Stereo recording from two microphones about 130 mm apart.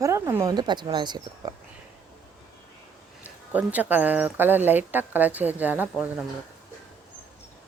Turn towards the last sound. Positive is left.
turn(degrees=-10)  # may be behind; listen again after turning